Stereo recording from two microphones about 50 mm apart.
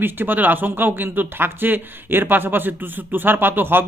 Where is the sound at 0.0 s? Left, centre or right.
Right.